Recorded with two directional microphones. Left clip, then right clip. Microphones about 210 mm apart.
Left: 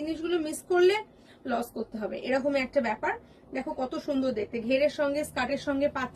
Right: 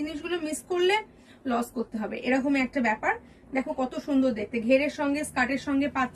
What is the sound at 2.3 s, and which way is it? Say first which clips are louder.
A woman's voice: even; 20° right (ahead or behind).